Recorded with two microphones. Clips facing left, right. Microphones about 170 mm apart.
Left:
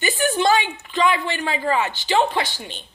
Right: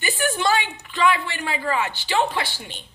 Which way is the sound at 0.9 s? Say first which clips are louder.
Left 1 dB; 20° left (ahead or behind).